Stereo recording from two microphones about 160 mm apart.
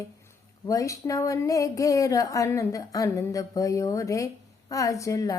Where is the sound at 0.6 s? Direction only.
20° left (ahead or behind).